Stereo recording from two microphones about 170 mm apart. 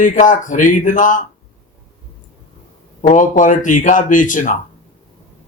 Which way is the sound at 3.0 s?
45° left (ahead or behind).